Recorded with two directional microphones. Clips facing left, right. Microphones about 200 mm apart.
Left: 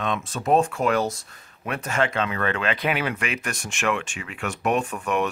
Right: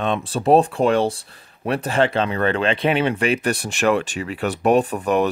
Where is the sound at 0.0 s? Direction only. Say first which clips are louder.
Right 6 dB; 30° right (ahead or behind).